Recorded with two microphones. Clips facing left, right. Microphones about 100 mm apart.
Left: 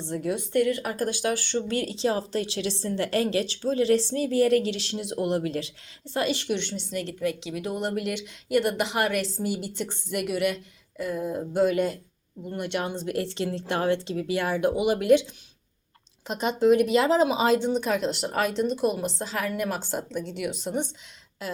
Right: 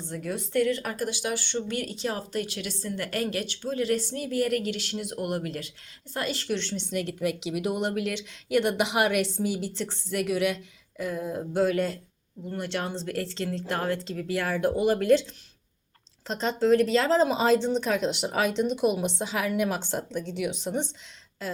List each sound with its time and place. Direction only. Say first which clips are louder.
0.1 s speech: left 3 dB; 20° left (ahead or behind)
0.9 s speech: left 3 dB; 45° left (ahead or behind)
1.6 s speech: left 5 dB; 30° left (ahead or behind)
6.9 s speech: right 2 dB; 5° right (ahead or behind)
7.2 s speech: even; 15° right (ahead or behind)
7.8 s speech: even; centre (ahead or behind)
9.7 s speech: even; 10° left (ahead or behind)
16.2 s speech: left 3 dB; 10° left (ahead or behind)